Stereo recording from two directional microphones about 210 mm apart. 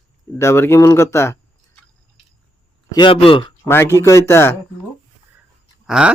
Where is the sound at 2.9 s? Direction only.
25° left (ahead or behind).